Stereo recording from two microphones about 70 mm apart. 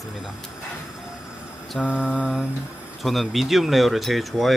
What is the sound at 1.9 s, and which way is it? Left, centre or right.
Mantra, centre.